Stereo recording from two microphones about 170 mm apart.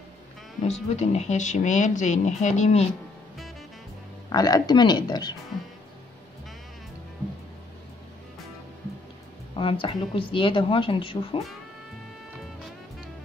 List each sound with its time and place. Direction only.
0.9 s speech: 40° left (ahead or behind)
4.3 s speech: 25° left (ahead or behind)
9.6 s speech: 30° left (ahead or behind)